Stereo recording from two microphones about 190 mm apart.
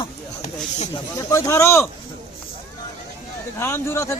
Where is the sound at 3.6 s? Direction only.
15° left (ahead or behind).